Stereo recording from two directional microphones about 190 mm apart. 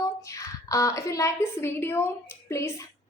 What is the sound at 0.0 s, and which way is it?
A woman's voice, 15° left (ahead or behind).